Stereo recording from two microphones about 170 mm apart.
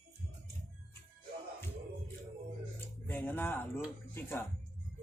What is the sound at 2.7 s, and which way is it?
Music, 10° left (ahead or behind).